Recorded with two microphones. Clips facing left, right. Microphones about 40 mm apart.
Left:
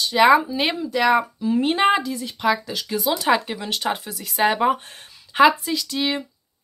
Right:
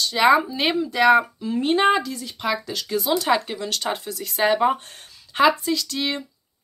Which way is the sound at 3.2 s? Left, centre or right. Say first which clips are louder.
Left 1 dB; centre.